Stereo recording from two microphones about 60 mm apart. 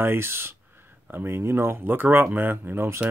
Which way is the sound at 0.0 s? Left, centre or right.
Right.